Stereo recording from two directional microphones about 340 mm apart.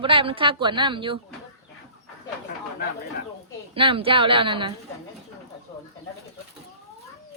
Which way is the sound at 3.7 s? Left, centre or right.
Centre.